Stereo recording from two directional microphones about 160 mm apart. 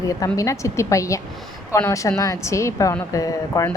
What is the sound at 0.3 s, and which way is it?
A woman's voice, 20° left (ahead or behind).